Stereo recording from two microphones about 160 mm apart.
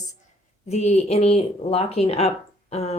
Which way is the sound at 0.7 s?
45° left (ahead or behind).